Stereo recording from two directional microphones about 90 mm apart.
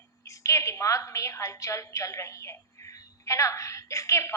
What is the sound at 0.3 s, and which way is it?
A woman's voice, 35° left (ahead or behind).